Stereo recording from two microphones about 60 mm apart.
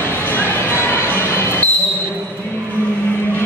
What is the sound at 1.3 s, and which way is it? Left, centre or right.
Basketball bounce, left.